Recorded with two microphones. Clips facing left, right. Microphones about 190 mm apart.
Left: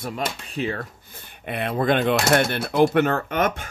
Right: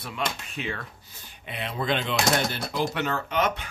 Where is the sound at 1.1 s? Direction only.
55° left (ahead or behind).